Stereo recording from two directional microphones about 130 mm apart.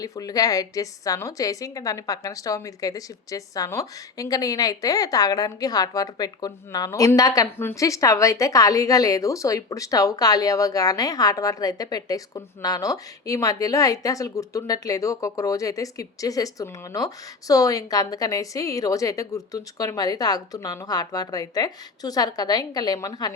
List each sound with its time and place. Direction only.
0.0 s a woman's voice: 30° left (ahead or behind)